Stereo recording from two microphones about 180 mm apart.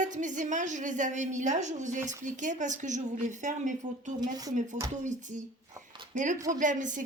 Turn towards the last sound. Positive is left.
turn(degrees=-45)  # may be behind; listen again after turning